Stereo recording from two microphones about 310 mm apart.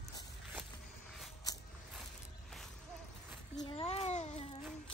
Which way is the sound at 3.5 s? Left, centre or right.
Centre.